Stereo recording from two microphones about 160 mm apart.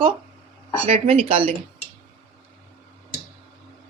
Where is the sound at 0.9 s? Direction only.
40° right (ahead or behind).